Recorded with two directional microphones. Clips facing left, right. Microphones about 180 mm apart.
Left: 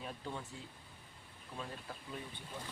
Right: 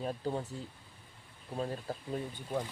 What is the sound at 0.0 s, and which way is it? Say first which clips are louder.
Speech: right 9 dB; 40° right (ahead or behind).